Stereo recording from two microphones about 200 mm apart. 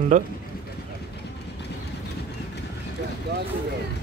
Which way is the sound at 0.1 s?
40° right (ahead or behind).